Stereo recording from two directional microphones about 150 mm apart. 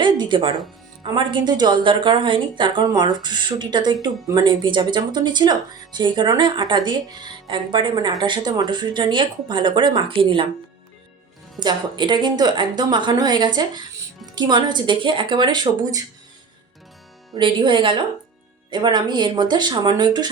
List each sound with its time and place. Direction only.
0.0 s a woman's voice: 30° right (ahead or behind)
11.6 s speech: 30° right (ahead or behind)
17.3 s a woman's voice: 30° right (ahead or behind)